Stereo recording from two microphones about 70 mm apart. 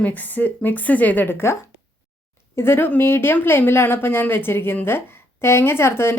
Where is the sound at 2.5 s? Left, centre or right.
Left.